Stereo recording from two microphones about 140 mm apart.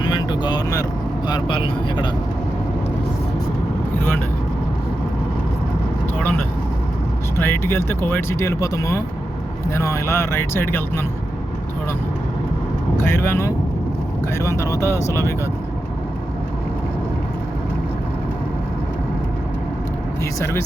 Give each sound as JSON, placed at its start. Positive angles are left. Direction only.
{"t": 0.0, "sound": "vehicle", "side_deg": 35}
{"t": 1.3, "sound": "speech", "side_deg": 35}
{"t": 7.3, "sound": "speech", "side_deg": 15}
{"t": 13.0, "sound": "speech", "side_deg": 15}
{"t": 20.4, "sound": "speech", "side_deg": 20}